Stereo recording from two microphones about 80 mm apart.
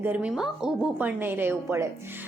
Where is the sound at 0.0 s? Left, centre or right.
Right.